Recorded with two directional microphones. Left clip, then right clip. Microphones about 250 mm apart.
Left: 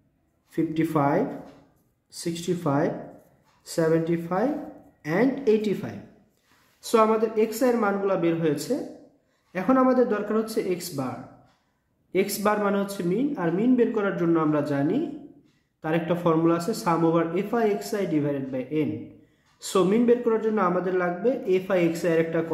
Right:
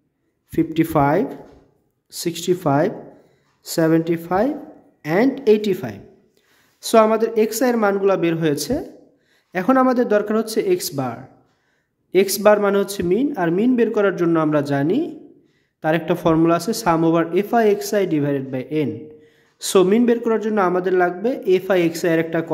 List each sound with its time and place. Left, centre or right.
0.5 s speech: right